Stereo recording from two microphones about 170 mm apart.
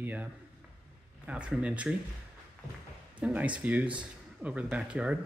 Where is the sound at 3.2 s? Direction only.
10° right (ahead or behind).